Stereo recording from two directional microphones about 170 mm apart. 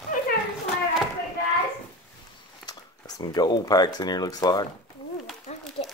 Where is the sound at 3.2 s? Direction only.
25° left (ahead or behind).